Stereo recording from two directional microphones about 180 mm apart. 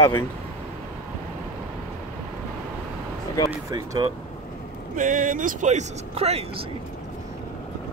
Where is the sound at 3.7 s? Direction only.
25° right (ahead or behind).